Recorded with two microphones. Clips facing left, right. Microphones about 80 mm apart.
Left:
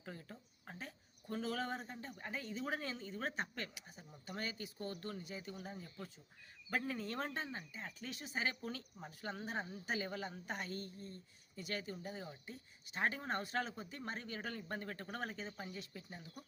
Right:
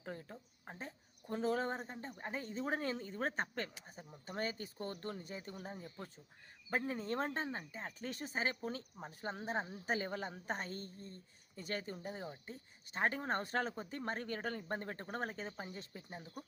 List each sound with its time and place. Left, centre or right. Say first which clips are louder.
0.0 s speech: right 4 dB; right
0.6 s speech: right 2 dB; right